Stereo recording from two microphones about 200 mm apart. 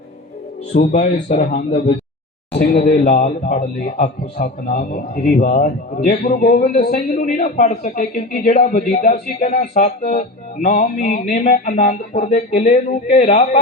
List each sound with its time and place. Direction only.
0.7 s music: 40° left (ahead or behind)
1.1 s speech: 35° left (ahead or behind)
7.1 s music: 35° left (ahead or behind)